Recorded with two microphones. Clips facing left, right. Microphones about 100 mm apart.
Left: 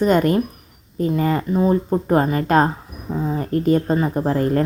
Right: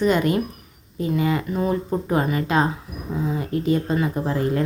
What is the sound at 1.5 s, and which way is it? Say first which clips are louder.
Speech: left 5 dB; 25° left (ahead or behind).